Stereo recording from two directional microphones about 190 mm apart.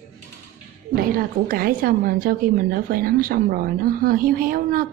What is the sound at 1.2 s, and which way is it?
A woman's voice, 50° right (ahead or behind).